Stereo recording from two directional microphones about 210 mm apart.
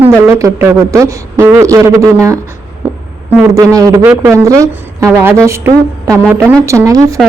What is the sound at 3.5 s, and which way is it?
Speech, 15° right (ahead or behind).